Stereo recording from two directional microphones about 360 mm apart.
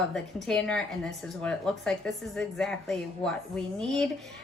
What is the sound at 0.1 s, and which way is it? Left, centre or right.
A woman's voice, centre.